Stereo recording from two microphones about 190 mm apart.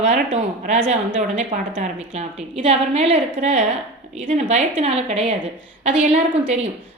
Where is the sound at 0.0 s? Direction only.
35° right (ahead or behind).